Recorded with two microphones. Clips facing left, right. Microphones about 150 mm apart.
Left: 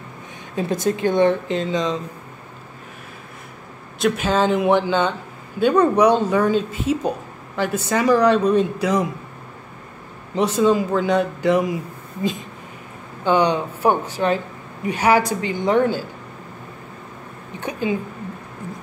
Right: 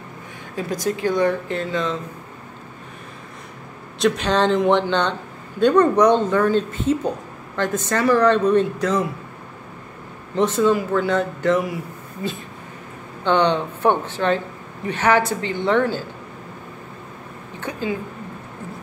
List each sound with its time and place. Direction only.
0.6 s speech: 25° left (ahead or behind)
4.0 s speech: 5° left (ahead or behind)
10.3 s speech: 15° left (ahead or behind)
17.6 s a woman's voice: 15° left (ahead or behind)